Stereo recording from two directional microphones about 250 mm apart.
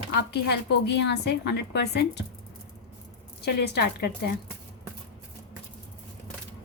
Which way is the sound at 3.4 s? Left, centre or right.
Left.